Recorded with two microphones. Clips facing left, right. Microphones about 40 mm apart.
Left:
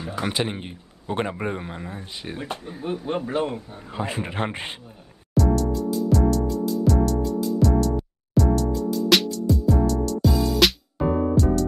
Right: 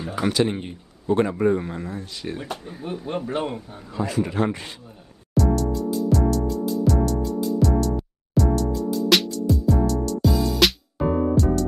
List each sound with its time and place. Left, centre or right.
0.5 s speech: centre
1.0 s a man's voice: left; by 3.3 s centre
3.4 s a man's voice: centre
3.9 s a man's voice: left
5.3 s music: centre